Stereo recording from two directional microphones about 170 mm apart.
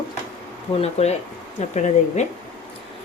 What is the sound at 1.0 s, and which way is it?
Speech, 40° left (ahead or behind).